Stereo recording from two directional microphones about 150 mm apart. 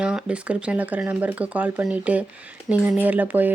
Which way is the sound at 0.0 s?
5° right (ahead or behind).